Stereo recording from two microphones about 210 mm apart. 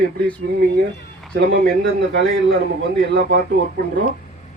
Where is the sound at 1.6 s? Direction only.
55° right (ahead or behind).